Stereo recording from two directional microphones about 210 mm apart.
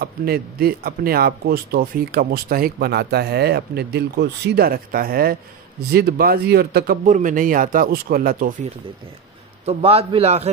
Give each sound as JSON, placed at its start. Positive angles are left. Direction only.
{"t": 0.0, "sound": "speech", "side_deg": -45}
{"t": 7.1, "sound": "speech", "side_deg": -35}
{"t": 9.7, "sound": "a man's voice", "side_deg": -30}